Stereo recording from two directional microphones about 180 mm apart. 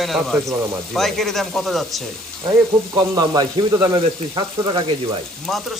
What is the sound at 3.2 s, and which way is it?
Speech, 20° right (ahead or behind).